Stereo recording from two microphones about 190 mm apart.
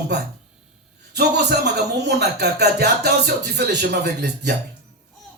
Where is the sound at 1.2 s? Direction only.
60° right (ahead or behind).